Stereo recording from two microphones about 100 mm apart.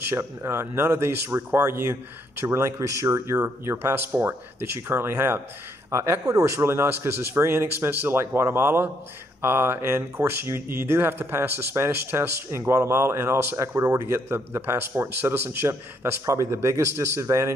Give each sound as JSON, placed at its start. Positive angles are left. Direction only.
{"t": 0.1, "sound": "speech", "side_deg": -25}